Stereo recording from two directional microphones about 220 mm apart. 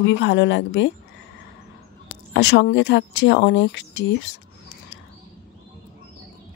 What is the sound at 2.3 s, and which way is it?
Speech, 50° left (ahead or behind).